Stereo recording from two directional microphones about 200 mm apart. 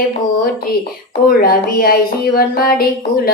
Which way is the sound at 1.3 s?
45° left (ahead or behind).